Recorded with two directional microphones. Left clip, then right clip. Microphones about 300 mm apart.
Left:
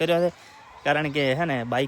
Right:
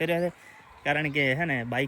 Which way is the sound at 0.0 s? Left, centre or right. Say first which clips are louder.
Left 5 dB; centre.